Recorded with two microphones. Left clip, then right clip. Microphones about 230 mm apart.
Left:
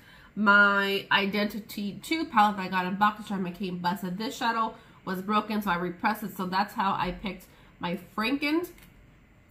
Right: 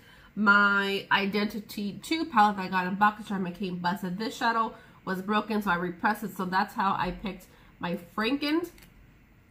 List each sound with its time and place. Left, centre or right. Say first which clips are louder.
0.4 s speech: left 1 dB; centre